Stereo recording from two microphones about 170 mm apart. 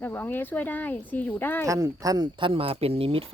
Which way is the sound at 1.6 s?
20° right (ahead or behind).